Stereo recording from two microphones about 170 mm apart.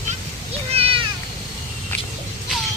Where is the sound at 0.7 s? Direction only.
35° right (ahead or behind).